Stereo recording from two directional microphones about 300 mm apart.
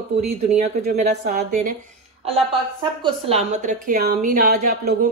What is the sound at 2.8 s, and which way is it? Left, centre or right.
A woman's voice, centre.